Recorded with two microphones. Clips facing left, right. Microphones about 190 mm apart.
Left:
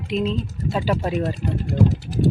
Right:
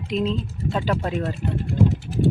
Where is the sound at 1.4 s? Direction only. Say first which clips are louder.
Left 1 dB; 40° left (ahead or behind).